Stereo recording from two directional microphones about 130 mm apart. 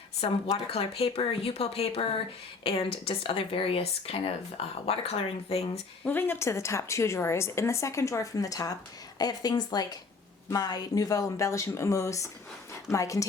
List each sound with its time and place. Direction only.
0.2 s speech: 45° left (ahead or behind)
6.1 s a woman's voice: 15° left (ahead or behind)